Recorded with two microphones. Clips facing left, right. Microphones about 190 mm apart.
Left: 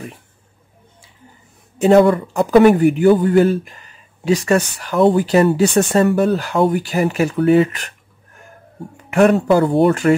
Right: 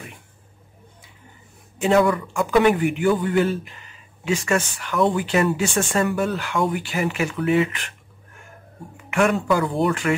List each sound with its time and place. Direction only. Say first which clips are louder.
1.8 s a man's voice: left 7 dB; 40° left (ahead or behind)
8.9 s a man's voice: left 7 dB; 40° left (ahead or behind)